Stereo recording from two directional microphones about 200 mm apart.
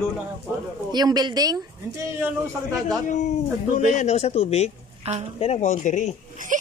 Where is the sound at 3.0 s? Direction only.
35° left (ahead or behind).